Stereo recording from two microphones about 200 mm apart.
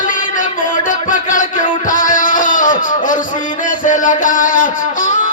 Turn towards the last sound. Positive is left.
turn(degrees=40)  # may be behind; listen again after turning